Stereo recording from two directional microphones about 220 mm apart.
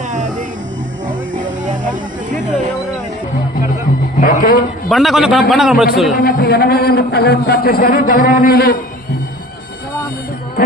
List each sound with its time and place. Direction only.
1.3 s music: 35° right (ahead or behind)
4.2 s a sound: 40° left (ahead or behind)
4.8 s a man's voice: centre (ahead or behind)
6.1 s a man's voice: 40° left (ahead or behind)